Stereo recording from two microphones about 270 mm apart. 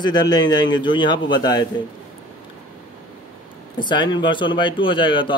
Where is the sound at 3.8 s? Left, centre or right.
Centre.